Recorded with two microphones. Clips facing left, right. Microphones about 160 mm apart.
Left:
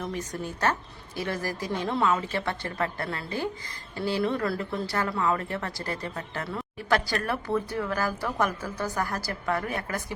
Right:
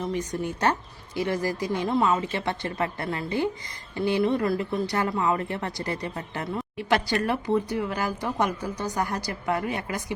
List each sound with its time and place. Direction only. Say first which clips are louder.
0.6 s speech: even; 15° right (ahead or behind)